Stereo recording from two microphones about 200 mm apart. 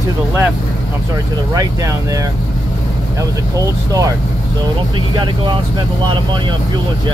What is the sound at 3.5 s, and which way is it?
Speech, 15° right (ahead or behind).